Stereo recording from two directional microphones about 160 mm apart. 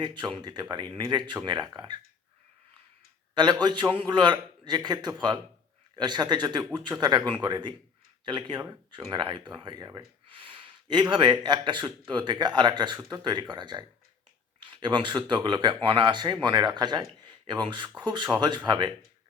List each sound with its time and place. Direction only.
0.0 s speech: 30° right (ahead or behind)
3.3 s speech: 25° right (ahead or behind)